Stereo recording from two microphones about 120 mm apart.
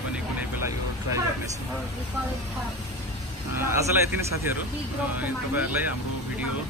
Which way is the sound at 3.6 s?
20° right (ahead or behind).